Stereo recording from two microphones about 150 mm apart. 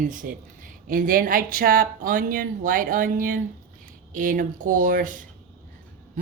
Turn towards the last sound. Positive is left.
turn(degrees=-65)  # may be behind; listen again after turning